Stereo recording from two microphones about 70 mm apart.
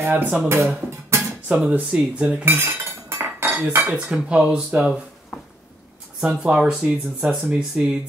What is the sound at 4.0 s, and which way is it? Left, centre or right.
Speech, centre.